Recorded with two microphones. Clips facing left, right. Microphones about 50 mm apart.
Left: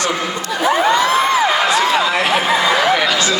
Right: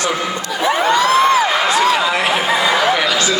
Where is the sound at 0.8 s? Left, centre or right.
Left.